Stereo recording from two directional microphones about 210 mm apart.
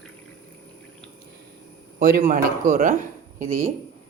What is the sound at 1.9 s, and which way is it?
Speech, 40° right (ahead or behind).